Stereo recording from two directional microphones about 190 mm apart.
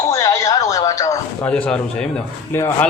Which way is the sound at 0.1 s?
15° left (ahead or behind).